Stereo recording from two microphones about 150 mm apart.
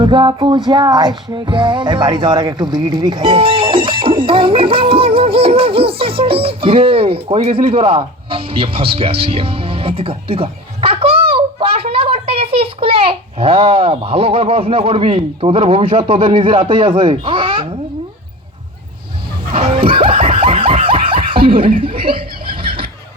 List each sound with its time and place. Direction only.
0.0 s music: 30° right (ahead or behind)
19.5 s snicker: 35° right (ahead or behind)
21.8 s music: 35° right (ahead or behind)
22.6 s a sound: 35° right (ahead or behind)